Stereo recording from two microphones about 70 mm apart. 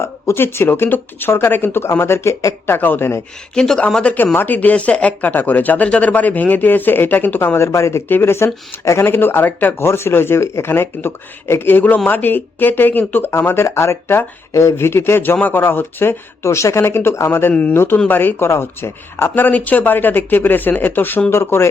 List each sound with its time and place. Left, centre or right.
0.0 s speech: left
2.6 s speech: left
3.5 s speech: centre; by 8.0 s left
8.0 s speech: left
8.8 s speech: left
9.0 s speech: left
17.5 s speech: centre
17.7 s speech: left